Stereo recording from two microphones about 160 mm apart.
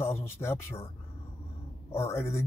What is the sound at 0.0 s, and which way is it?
Speech, 15° left (ahead or behind).